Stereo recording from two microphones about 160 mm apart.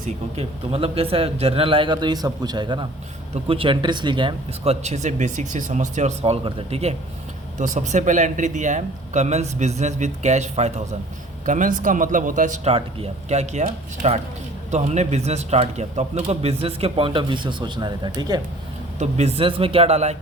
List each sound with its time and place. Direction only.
0.3 s a man's voice: 40° right (ahead or behind)
18.9 s a man's voice: 40° right (ahead or behind)